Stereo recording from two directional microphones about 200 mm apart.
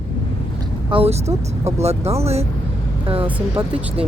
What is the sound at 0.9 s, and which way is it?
Speech, 30° right (ahead or behind).